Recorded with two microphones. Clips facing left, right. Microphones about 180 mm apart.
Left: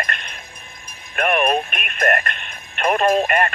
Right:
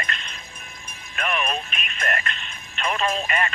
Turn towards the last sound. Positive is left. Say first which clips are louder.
# left 8 dB
turn(degrees=55)  # may be behind; listen again after turning